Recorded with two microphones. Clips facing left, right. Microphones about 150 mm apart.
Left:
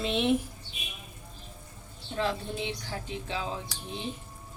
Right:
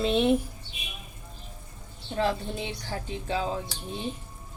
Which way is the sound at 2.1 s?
40° right (ahead or behind).